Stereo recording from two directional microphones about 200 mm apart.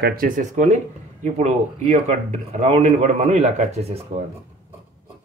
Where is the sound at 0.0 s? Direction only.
45° right (ahead or behind).